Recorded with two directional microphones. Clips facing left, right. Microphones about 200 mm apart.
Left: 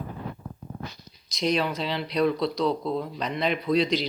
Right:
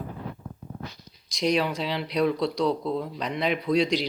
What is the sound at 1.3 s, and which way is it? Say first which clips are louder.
Speech: right 1 dB; 15° right (ahead or behind).